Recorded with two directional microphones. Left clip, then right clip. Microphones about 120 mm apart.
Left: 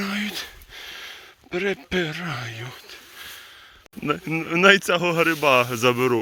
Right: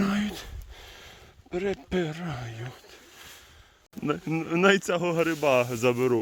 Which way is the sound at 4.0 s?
20° right (ahead or behind).